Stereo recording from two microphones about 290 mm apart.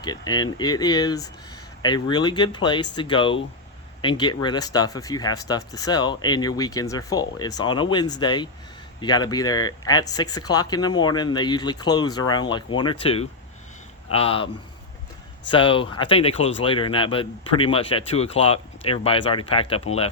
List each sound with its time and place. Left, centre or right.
0.0 s speech: centre